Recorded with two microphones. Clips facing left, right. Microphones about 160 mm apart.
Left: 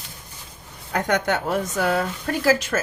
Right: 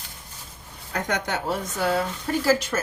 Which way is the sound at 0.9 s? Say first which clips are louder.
Left 5 dB; 60° left (ahead or behind).